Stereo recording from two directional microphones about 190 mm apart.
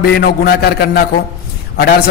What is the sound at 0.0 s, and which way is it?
A man's voice, 55° left (ahead or behind).